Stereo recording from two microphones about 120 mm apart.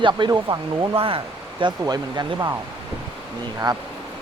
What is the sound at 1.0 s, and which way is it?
Speech, 50° right (ahead or behind).